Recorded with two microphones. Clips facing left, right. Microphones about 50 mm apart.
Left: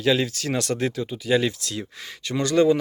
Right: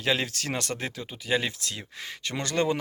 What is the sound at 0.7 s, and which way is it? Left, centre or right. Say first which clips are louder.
Speech: left 8 dB; centre.